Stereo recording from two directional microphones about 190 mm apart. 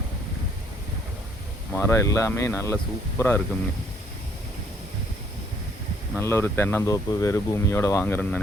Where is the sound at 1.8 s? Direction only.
15° left (ahead or behind).